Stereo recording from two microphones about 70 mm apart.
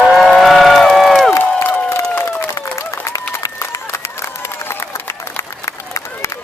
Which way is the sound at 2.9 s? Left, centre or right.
Left.